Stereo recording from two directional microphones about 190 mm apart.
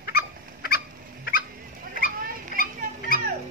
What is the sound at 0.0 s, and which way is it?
Fowl, 55° left (ahead or behind).